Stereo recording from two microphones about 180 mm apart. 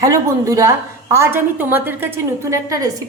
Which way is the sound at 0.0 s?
20° right (ahead or behind).